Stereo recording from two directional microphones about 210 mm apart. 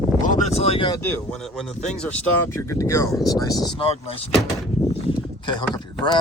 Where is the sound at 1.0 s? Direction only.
5° left (ahead or behind); by 4.2 s 25° left (ahead or behind).